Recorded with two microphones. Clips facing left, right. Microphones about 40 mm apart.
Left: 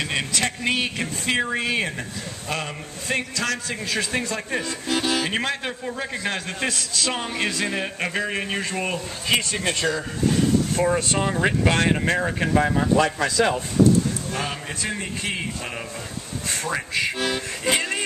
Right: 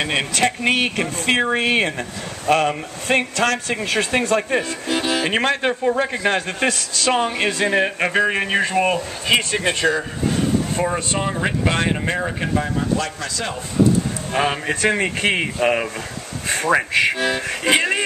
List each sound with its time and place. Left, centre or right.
0.0 s speech: right
4.4 s a man's voice: right
4.8 s music: centre
5.3 s a man's voice: right
10.8 s speech: centre
13.0 s speech: centre
14.3 s speech: right
14.8 s speech: right
17.6 s speech: right